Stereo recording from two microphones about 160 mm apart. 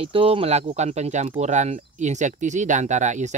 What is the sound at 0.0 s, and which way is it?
Speech, 35° right (ahead or behind).